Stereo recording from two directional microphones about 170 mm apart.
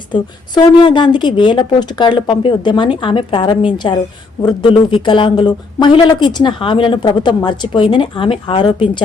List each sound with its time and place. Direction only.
0.1 s speech: 25° left (ahead or behind)